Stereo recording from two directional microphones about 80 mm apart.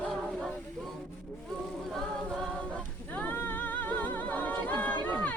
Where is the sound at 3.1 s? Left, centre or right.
Left.